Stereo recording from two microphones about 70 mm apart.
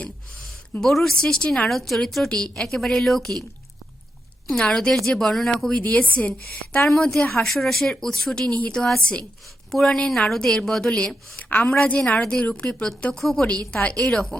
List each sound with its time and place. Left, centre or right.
0.8 s a woman's voice: centre
4.7 s a woman's voice: centre
5.8 s a woman's voice: left
6.8 s a woman's voice: centre